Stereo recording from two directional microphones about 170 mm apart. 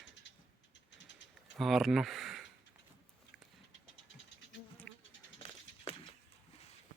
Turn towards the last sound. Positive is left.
turn(degrees=35)  # may be behind; listen again after turning